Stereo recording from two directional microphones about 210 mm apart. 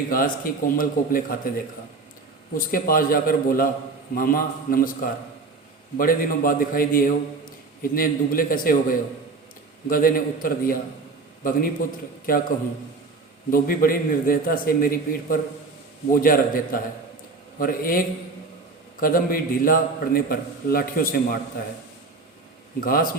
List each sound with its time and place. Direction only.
0.1 s a man's voice: 40° left (ahead or behind)
2.7 s a man's voice: 45° left (ahead or behind)
22.8 s a man's voice: 45° left (ahead or behind)